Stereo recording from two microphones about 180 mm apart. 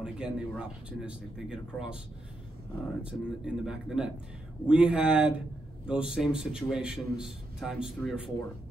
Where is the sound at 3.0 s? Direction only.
5° right (ahead or behind).